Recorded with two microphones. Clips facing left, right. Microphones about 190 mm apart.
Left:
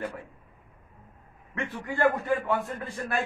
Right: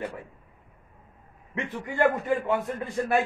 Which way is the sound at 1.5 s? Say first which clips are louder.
Right 1 dB; 20° right (ahead or behind).